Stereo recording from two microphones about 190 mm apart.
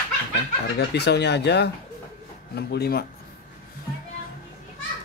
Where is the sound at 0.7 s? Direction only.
60° left (ahead or behind).